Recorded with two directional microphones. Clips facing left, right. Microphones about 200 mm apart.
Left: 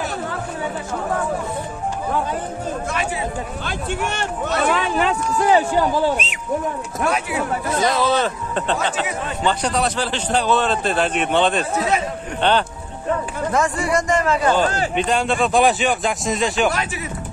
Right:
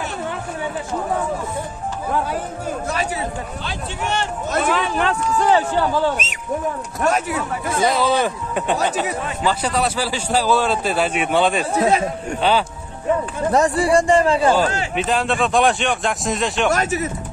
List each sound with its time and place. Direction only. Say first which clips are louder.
3.6 s speech: left 3 dB; 50° left (ahead or behind)
4.6 s speech: left 1 dB; centre (ahead or behind)
6.1 s a man's voice: left 1 dB; 40° right (ahead or behind)
8.0 s a man's voice: even; 10° right (ahead or behind)
13.5 s a man's voice: right 4 dB; 35° right (ahead or behind)
15.0 s speech: even; centre (ahead or behind)
16.7 s speech: right 5 dB; 45° right (ahead or behind)